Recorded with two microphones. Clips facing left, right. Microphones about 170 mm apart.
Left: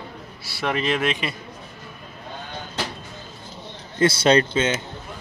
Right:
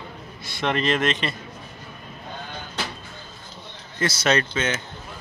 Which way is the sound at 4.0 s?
30° left (ahead or behind).